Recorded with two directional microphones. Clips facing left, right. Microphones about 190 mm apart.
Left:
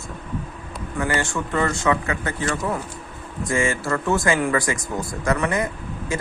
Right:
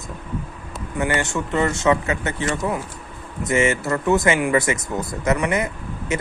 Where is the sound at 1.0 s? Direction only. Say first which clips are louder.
Right 2 dB; 20° right (ahead or behind).